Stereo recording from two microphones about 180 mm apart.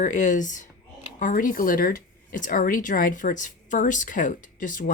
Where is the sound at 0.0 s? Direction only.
45° left (ahead or behind).